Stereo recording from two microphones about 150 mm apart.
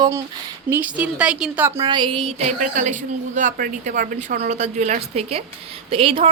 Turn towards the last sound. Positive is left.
turn(degrees=-35)  # may be behind; listen again after turning